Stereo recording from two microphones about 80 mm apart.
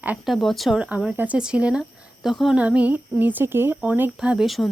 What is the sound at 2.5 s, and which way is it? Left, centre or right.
Speech, centre.